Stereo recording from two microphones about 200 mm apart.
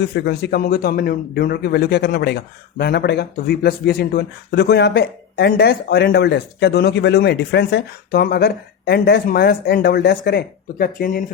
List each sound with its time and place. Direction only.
0.1 s a man's voice: 55° left (ahead or behind)